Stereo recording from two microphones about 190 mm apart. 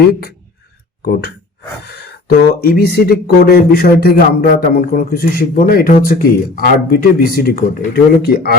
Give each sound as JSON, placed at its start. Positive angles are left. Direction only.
{"t": 0.1, "sound": "speech", "side_deg": 55}